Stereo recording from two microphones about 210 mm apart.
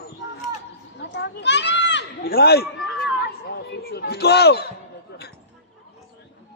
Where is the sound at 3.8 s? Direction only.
50° left (ahead or behind).